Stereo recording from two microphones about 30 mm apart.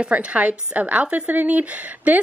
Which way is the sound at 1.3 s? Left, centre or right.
Right.